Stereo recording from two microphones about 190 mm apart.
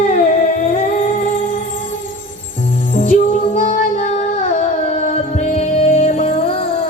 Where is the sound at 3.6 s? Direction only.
45° left (ahead or behind).